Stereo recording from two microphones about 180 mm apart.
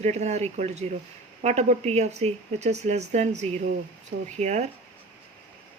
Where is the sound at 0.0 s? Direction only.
40° right (ahead or behind).